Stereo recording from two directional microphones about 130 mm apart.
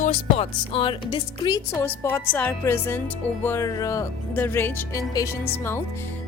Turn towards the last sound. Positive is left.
turn(degrees=20)  # may be behind; listen again after turning